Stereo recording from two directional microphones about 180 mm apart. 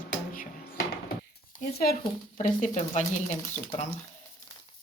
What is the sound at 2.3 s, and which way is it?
Speech, 45° left (ahead or behind).